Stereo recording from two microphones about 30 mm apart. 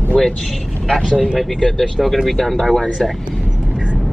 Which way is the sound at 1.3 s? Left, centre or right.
Centre.